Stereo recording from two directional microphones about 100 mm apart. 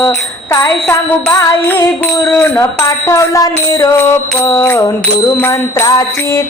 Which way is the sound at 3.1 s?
35° left (ahead or behind).